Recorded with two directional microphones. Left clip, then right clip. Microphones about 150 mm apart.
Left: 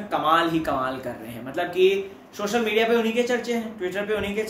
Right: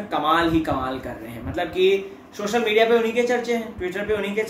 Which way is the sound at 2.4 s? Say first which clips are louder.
Right 3 dB; centre (ahead or behind).